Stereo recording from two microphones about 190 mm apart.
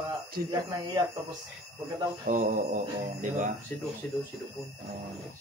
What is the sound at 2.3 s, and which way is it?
Mantra, 40° right (ahead or behind).